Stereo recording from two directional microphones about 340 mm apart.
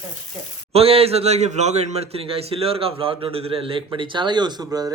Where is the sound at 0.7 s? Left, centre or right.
Centre.